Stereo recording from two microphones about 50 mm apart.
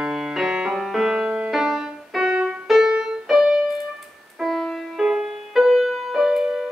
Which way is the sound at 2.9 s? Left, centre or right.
Centre.